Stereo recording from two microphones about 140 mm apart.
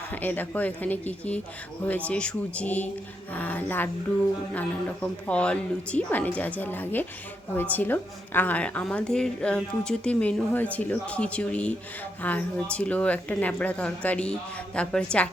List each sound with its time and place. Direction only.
0.2 s a woman's voice: 10° left (ahead or behind)
5.3 s a woman's voice: 10° left (ahead or behind)